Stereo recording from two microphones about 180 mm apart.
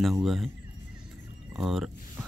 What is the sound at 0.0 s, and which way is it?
Speech, centre (ahead or behind).